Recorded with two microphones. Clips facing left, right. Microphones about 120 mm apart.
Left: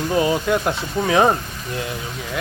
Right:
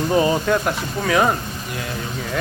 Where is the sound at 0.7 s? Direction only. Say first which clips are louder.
Left 1 dB; 25° left (ahead or behind).